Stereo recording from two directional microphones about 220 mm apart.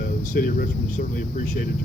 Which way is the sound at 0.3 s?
40° left (ahead or behind).